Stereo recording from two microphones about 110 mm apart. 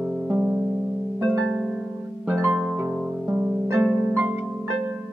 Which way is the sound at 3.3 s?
20° right (ahead or behind).